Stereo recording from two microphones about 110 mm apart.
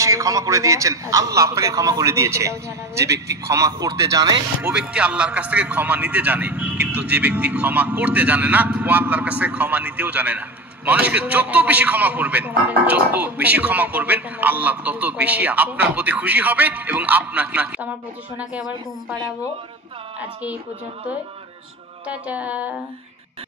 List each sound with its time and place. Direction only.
0.0 s a man's voice: 30° right (ahead or behind)
4.6 s a man's voice: 10° right (ahead or behind)
22.0 s a man's voice: 10° right (ahead or behind)